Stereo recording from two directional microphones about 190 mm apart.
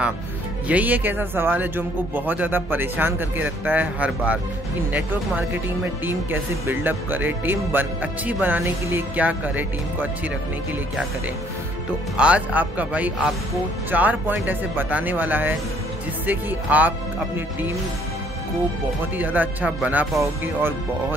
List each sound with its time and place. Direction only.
0.7 s speech: 10° right (ahead or behind)
12.2 s speech: 5° right (ahead or behind)
19.1 s speech: 10° right (ahead or behind)